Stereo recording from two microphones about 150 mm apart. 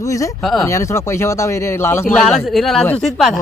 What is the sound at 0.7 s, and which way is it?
A man's voice, 20° left (ahead or behind).